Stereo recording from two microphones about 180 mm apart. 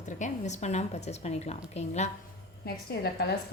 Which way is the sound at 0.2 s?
40° left (ahead or behind).